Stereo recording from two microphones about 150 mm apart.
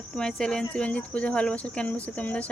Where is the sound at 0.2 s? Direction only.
5° left (ahead or behind).